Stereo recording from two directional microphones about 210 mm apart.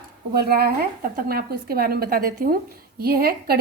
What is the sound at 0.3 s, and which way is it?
A woman's voice, 45° right (ahead or behind).